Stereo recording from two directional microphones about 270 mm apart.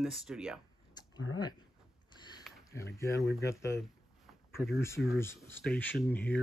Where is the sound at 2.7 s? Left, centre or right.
Centre.